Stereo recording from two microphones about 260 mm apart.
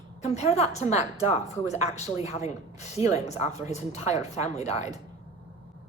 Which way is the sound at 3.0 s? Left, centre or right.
Left.